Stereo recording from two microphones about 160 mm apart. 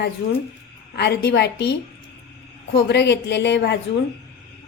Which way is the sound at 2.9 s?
90° left.